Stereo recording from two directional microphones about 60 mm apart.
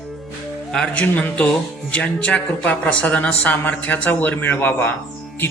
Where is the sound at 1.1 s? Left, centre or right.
Left.